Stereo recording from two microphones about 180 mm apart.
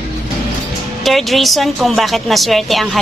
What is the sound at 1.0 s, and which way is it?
A woman's voice, centre (ahead or behind).